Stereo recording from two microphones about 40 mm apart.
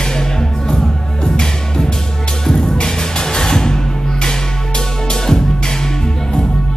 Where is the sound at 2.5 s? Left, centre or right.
Centre.